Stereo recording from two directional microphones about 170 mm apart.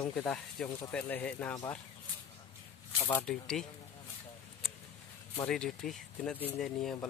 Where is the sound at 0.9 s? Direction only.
10° left (ahead or behind).